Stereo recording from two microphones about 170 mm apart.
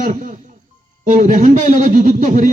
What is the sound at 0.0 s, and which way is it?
A man's voice, 50° right (ahead or behind).